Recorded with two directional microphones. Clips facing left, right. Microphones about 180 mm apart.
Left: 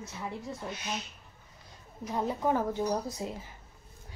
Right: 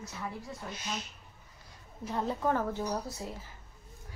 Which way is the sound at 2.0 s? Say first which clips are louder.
Left 1 dB; 10° left (ahead or behind).